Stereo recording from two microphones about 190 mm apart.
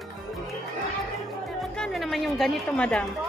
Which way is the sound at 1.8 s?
Centre (ahead or behind).